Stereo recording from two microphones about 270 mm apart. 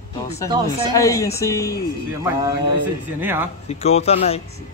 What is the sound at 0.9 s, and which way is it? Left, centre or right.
Speech, centre.